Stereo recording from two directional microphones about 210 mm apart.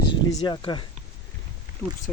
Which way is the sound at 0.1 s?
20° left (ahead or behind).